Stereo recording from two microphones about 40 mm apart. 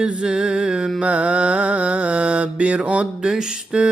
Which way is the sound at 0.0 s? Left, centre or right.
Centre.